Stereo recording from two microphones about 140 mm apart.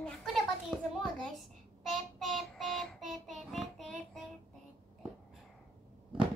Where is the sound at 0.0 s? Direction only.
Centre (ahead or behind).